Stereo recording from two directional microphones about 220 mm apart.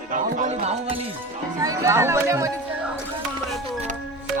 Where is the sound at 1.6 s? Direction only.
15° right (ahead or behind).